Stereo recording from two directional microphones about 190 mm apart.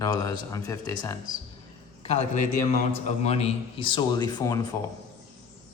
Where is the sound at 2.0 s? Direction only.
35° left (ahead or behind); by 4.7 s 20° left (ahead or behind).